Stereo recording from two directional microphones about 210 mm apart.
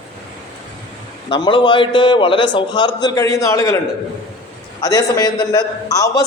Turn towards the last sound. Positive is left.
turn(degrees=15)  # may be behind; listen again after turning